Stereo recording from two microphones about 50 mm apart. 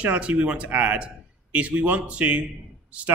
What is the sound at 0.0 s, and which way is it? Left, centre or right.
A man's voice, right.